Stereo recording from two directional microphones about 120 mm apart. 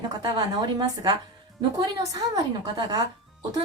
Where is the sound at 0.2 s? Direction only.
35° right (ahead or behind).